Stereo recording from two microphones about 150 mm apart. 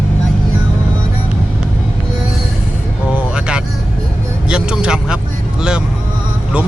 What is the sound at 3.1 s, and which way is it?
Vehicle, 10° right (ahead or behind).